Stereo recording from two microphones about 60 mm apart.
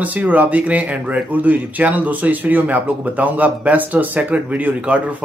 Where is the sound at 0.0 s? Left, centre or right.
Right.